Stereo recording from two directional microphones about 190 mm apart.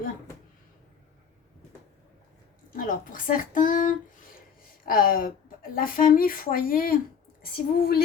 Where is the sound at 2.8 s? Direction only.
45° left (ahead or behind).